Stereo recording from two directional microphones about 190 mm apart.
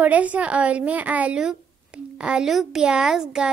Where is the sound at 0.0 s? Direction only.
10° right (ahead or behind).